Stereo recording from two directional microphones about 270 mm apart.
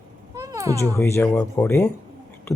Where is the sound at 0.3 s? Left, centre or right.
Centre.